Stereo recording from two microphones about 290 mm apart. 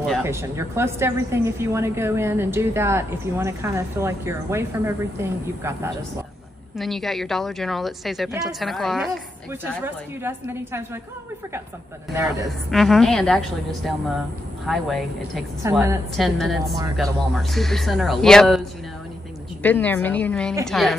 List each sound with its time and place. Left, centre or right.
0.0 s a woman's voice: centre
12.7 s a woman's voice: centre
19.6 s a woman's voice: centre